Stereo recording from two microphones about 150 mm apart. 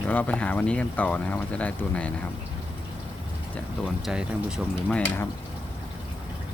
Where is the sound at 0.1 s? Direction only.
10° left (ahead or behind).